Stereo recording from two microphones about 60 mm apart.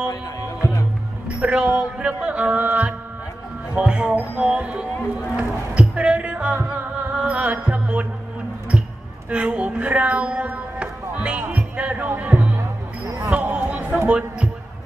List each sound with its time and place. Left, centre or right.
0.1 s music: left
1.4 s speech: centre
5.8 s music: centre
9.3 s speech: right
12.2 s music: right
13.2 s basketball bounce: right
14.0 s speech: centre